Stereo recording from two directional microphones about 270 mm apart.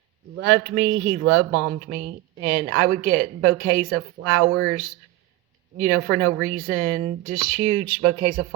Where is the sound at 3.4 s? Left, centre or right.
Right.